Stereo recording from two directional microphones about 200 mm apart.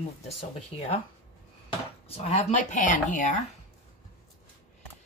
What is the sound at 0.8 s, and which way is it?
Speech, 30° left (ahead or behind).